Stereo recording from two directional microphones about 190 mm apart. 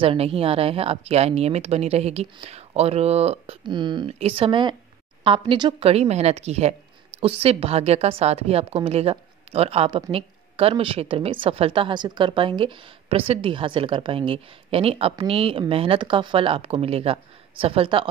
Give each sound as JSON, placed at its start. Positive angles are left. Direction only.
{"t": 0.0, "sound": "a woman's voice", "side_deg": -30}